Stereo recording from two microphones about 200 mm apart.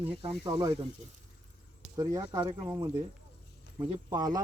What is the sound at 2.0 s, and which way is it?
Speech, 15° right (ahead or behind).